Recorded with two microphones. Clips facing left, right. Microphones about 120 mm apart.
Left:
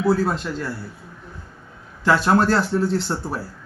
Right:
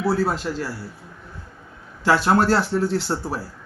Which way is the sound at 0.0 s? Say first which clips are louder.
Left 2 dB; 10° right (ahead or behind).